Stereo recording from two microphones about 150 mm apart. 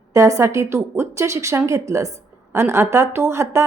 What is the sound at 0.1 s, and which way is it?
A woman's voice, 20° right (ahead or behind).